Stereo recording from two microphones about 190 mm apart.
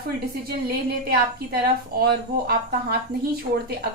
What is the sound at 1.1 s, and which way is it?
A woman's voice, 55° right (ahead or behind).